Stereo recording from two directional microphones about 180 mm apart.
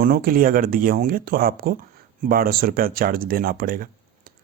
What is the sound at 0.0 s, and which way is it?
A man's voice, 55° right (ahead or behind).